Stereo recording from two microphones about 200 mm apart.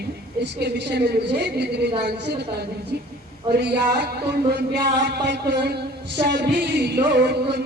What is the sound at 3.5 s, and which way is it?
Speech, 55° right (ahead or behind).